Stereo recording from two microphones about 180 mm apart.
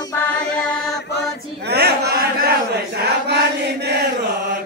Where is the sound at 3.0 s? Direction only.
65° right (ahead or behind).